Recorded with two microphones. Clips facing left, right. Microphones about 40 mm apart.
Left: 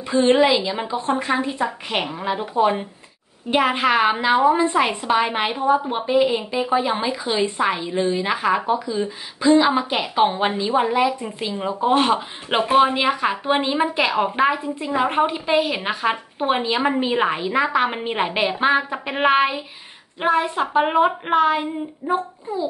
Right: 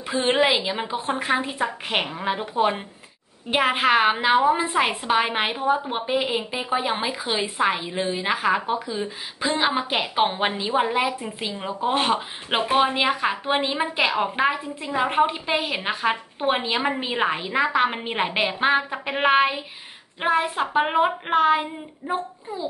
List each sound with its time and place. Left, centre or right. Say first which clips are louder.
0.1 s a woman's voice: left 4 dB; centre
2.2 s speech: left 2 dB; centre
3.7 s a woman's voice: left 1 dB; centre
6.5 s speech: left 6 dB; right
7.0 s a woman's voice: left 4 dB; centre
8.6 s a woman's voice: left 4 dB; centre
11.2 s a woman's voice: left 4 dB; centre